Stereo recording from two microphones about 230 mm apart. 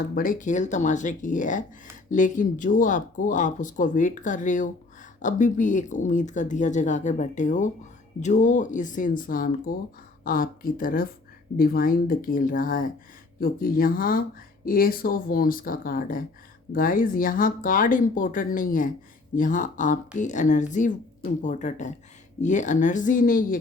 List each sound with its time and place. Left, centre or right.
0.1 s speech: left